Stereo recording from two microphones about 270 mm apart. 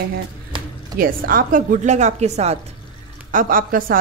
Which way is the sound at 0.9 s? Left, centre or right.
Right.